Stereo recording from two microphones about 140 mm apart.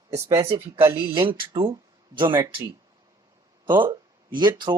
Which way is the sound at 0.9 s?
40° right (ahead or behind).